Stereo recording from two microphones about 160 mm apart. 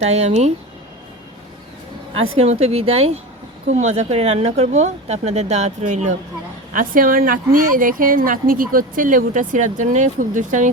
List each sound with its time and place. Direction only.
0.1 s speech: 40° right (ahead or behind)
2.1 s speech: 40° right (ahead or behind)